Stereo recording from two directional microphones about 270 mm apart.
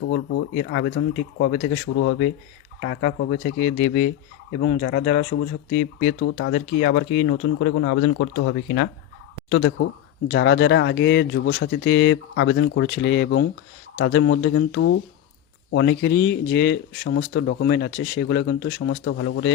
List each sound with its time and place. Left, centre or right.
0.0 s speech: left
0.5 s speech: left
2.8 s speech: left